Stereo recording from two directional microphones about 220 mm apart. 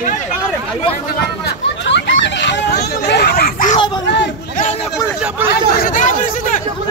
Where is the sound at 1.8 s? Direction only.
55° left (ahead or behind); by 3.8 s 35° left (ahead or behind).